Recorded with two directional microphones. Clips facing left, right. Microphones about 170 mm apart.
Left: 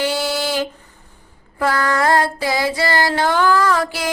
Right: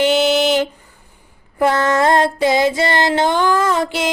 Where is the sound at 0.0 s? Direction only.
20° right (ahead or behind).